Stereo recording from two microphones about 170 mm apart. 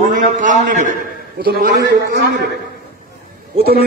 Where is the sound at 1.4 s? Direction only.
65° right (ahead or behind); by 2.4 s 85° right.